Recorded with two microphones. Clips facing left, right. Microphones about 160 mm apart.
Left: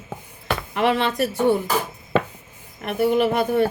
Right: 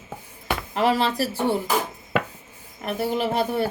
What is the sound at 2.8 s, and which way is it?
Speech, 30° right (ahead or behind).